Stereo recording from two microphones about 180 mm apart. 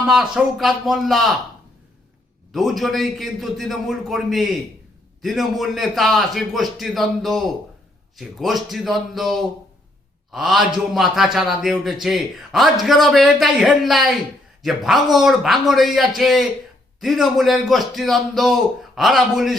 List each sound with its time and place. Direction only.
0.1 s a man's voice: centre (ahead or behind)
2.5 s a man's voice: centre (ahead or behind)